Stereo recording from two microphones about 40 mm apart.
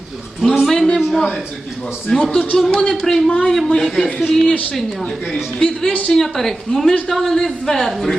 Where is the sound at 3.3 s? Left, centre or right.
Left; by 4.6 s centre.